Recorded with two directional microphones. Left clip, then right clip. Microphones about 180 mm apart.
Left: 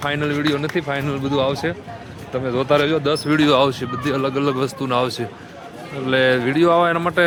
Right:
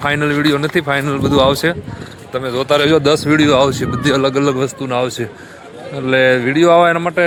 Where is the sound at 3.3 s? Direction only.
15° right (ahead or behind).